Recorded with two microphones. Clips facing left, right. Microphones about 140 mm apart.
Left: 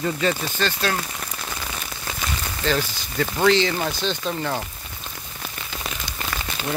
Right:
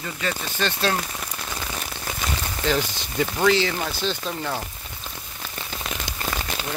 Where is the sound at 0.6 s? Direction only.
25° right (ahead or behind).